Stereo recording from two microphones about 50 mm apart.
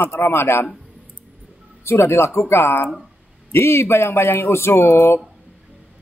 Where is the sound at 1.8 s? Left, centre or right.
Left.